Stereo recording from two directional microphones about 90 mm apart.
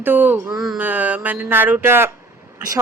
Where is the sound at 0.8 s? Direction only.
20° right (ahead or behind).